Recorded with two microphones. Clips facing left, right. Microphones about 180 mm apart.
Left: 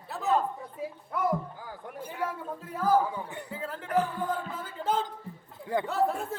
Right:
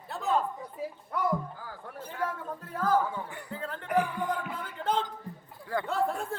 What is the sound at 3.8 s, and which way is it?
Music, 15° right (ahead or behind).